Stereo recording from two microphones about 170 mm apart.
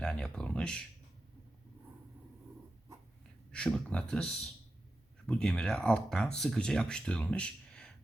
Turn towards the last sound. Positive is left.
turn(degrees=5)  # may be behind; listen again after turning